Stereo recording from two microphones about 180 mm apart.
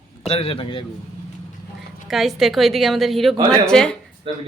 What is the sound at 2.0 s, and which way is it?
A woman's voice, centre (ahead or behind).